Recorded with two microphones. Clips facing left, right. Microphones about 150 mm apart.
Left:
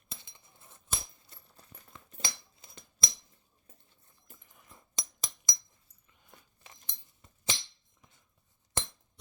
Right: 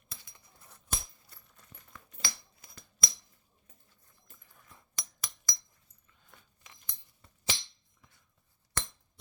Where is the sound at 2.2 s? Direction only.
25° left (ahead or behind).